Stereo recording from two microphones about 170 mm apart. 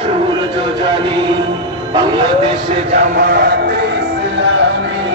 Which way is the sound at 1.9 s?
25° right (ahead or behind).